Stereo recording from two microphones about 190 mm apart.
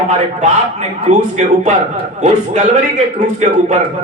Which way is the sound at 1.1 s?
40° right (ahead or behind).